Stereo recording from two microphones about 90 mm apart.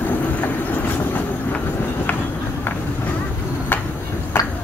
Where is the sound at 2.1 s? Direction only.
20° left (ahead or behind).